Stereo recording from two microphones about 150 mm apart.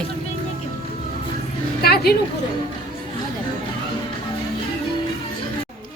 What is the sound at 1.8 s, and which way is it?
Speech, 90° left.